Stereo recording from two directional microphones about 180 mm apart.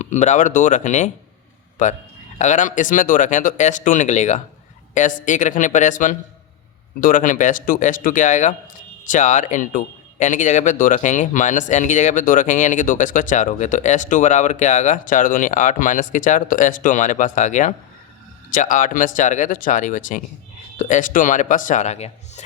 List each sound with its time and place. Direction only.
0.0 s speech: 40° left (ahead or behind)